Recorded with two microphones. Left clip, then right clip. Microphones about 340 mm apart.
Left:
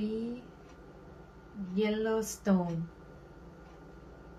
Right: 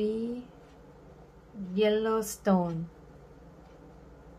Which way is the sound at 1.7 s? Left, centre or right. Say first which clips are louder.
Right 5 dB; centre.